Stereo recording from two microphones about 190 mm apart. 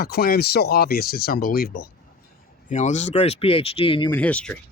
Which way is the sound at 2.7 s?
40° left (ahead or behind).